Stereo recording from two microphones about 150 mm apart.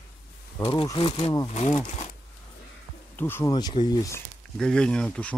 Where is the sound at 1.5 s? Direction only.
50° left (ahead or behind).